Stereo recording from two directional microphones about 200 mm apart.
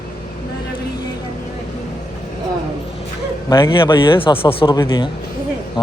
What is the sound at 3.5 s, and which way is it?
Speech, 20° left (ahead or behind).